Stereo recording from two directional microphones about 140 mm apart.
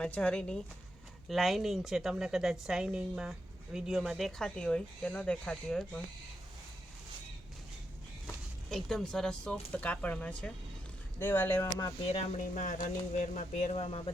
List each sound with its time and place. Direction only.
0.0 s a woman's voice: 10° left (ahead or behind)
8.7 s speech: centre (ahead or behind)
12.4 s speech: 70° left (ahead or behind); by 14.1 s 45° left (ahead or behind)